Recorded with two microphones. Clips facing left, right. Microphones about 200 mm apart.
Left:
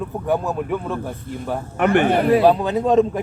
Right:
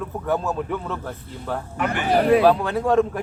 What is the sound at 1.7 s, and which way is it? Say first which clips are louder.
Speech: left 10 dB; 60° left (ahead or behind).